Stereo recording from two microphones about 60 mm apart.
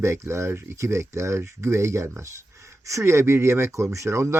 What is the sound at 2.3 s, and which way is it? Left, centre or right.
Speech, right.